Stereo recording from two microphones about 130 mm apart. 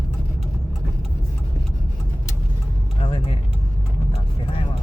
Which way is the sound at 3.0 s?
40° left (ahead or behind).